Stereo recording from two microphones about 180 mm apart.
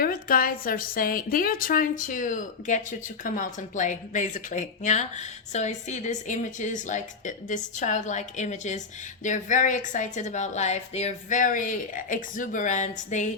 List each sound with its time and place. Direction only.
0.0 s a woman's voice: 55° left (ahead or behind)